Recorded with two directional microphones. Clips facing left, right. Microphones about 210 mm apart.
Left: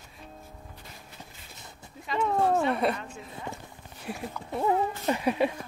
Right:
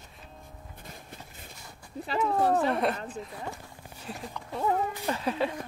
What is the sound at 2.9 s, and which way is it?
Speech, 35° right (ahead or behind).